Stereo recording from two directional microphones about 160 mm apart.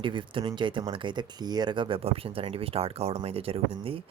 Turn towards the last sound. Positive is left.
turn(degrees=-35)  # may be behind; listen again after turning